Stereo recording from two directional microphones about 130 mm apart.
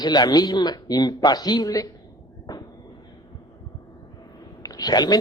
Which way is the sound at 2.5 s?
30° left (ahead or behind).